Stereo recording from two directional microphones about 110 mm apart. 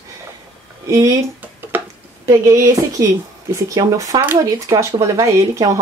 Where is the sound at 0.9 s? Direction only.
30° right (ahead or behind).